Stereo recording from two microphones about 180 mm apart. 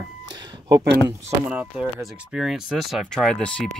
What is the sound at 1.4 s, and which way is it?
Speech, 5° right (ahead or behind).